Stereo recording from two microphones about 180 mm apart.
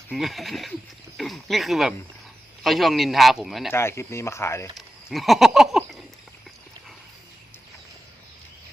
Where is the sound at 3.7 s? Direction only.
15° left (ahead or behind).